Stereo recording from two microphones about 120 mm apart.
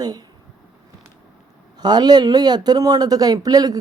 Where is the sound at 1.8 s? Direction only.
35° right (ahead or behind).